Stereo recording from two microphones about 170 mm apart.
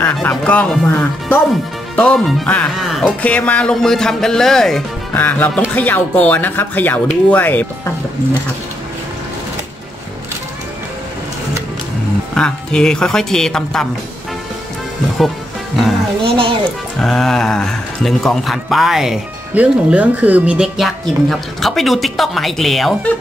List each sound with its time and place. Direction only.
0.0 s speech: 10° left (ahead or behind)
12.4 s speech: 5° left (ahead or behind)
16.3 s music: 30° right (ahead or behind)
17.0 s speech: centre (ahead or behind)